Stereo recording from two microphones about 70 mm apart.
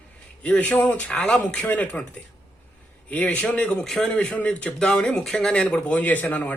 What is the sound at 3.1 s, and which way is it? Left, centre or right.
Speech, left.